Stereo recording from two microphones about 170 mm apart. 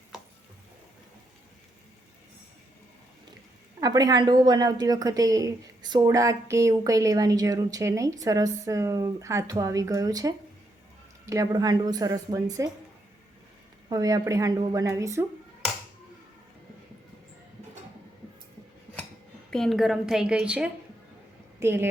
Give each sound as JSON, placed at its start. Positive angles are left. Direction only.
{"t": 3.8, "sound": "speech", "side_deg": -20}
{"t": 13.9, "sound": "speech", "side_deg": -20}
{"t": 19.5, "sound": "a woman's voice", "side_deg": 5}